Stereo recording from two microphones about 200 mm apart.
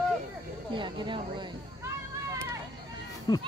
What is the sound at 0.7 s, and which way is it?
Speech, 25° right (ahead or behind).